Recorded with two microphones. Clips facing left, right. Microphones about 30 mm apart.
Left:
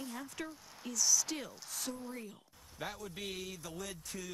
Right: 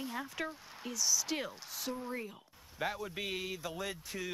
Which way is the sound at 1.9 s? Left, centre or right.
Right.